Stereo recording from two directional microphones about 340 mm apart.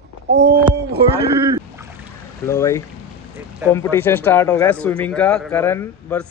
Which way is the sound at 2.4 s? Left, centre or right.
Centre.